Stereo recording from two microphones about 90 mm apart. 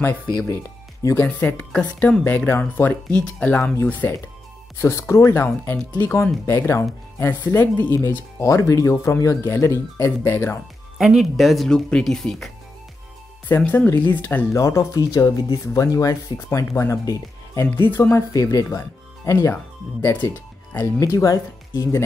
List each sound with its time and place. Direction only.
0.0 s speech: 20° left (ahead or behind); by 8.9 s 35° left (ahead or behind)
8.9 s speech: 25° left (ahead or behind)
9.2 s speech: 35° left (ahead or behind)
11.0 s speech: 5° right (ahead or behind)
13.6 s speech: 20° left (ahead or behind)
14.6 s speech: 35° left (ahead or behind)
17.7 s speech: 25° left (ahead or behind)
18.3 s speech: 40° left (ahead or behind)
19.3 s speech: 25° left (ahead or behind)